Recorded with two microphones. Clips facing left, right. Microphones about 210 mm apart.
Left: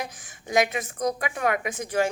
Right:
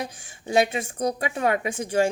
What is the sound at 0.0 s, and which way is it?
A woman's voice, 30° right (ahead or behind).